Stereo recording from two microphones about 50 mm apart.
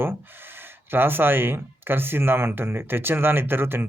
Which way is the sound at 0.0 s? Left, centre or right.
Right.